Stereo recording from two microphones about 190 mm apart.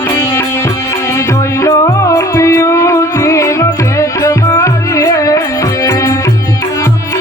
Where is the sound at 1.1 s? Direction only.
15° left (ahead or behind).